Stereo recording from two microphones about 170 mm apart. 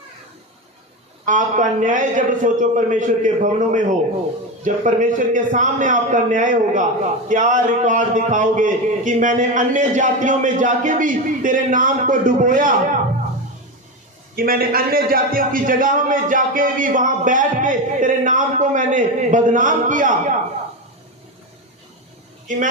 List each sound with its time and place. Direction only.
1.2 s a man's voice: 50° right (ahead or behind)
14.3 s a man's voice: 60° right (ahead or behind)